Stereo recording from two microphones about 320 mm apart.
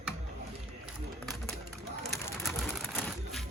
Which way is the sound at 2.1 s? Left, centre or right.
Centre.